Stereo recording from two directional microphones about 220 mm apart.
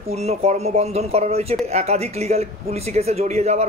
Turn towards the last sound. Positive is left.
turn(degrees=-30)  # may be behind; listen again after turning